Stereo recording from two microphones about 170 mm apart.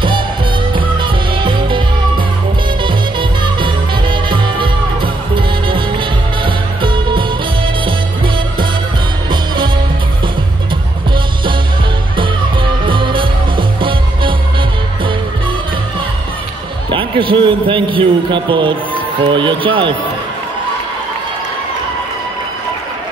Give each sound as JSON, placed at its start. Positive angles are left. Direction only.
{"t": 0.7, "sound": "music", "side_deg": -30}
{"t": 12.2, "sound": "music", "side_deg": -30}
{"t": 16.9, "sound": "a sound", "side_deg": -30}
{"t": 19.2, "sound": "speech", "side_deg": -30}